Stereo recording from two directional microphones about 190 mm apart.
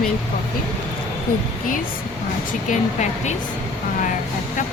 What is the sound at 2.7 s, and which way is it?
Speech, 40° left (ahead or behind).